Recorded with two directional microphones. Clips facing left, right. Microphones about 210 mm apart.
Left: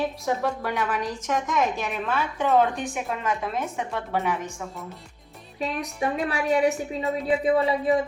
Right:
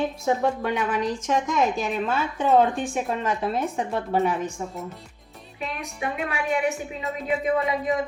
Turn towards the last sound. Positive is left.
turn(degrees=30)  # may be behind; listen again after turning